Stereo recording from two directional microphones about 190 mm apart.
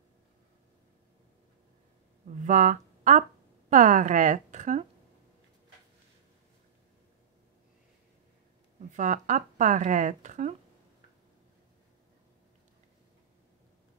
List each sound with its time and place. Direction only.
2.2 s speech: 40° right (ahead or behind)
8.9 s speech: 40° right (ahead or behind)